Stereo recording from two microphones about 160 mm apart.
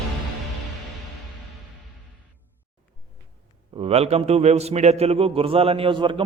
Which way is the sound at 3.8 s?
40° right (ahead or behind).